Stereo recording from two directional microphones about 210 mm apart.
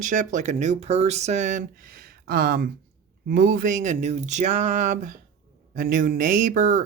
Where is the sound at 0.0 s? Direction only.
35° right (ahead or behind).